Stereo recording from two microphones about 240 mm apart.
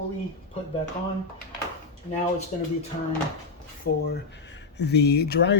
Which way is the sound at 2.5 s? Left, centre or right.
Left.